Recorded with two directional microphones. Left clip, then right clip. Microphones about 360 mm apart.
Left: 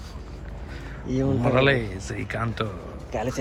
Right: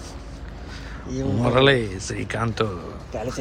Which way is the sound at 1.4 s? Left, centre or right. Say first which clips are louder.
Right 4 dB; centre.